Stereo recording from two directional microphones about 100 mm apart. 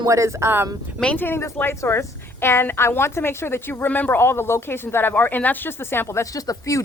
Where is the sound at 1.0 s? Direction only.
20° left (ahead or behind).